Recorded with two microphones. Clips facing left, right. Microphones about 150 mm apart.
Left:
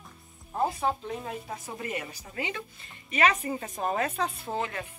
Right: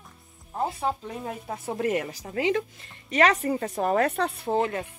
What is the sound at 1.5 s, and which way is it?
Speech, 70° right (ahead or behind).